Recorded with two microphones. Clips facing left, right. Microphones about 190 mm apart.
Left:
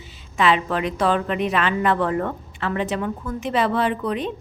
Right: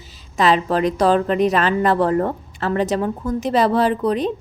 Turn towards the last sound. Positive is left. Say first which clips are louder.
# right 5 dB
turn(degrees=-35)  # may be behind; listen again after turning